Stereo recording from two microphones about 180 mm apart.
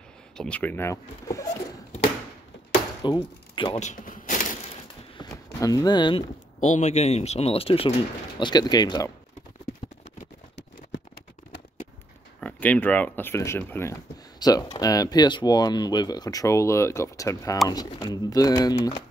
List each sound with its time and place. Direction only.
0.4 s speech: 10° left (ahead or behind)
3.0 s speech: 25° left (ahead or behind)
3.8 s cash register: 45° left (ahead or behind)
5.1 s a sound: 20° left (ahead or behind)
6.6 s speech: 40° left (ahead or behind); by 9.1 s 20° left (ahead or behind)
12.4 s speech: 10° left (ahead or behind)